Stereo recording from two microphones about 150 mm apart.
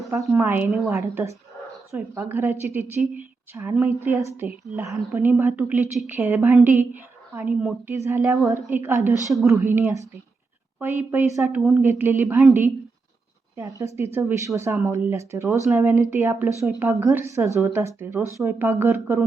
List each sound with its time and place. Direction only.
0.1 s a woman's voice: 20° right (ahead or behind)
0.9 s a woman's voice: 20° right (ahead or behind)
9.3 s speech: centre (ahead or behind)
9.6 s a woman's voice: 15° right (ahead or behind)
13.6 s a woman's voice: 20° right (ahead or behind)